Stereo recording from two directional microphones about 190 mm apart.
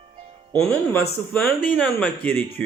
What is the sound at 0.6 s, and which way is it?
Speech, 10° left (ahead or behind).